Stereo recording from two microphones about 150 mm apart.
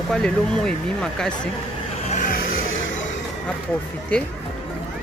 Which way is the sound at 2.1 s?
65° left (ahead or behind).